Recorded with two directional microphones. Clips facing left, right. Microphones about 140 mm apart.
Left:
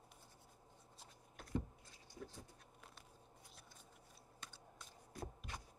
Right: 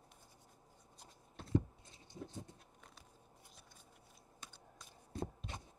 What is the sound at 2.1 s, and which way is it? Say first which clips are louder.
Vehicle: right 5 dB; 20° right (ahead or behind).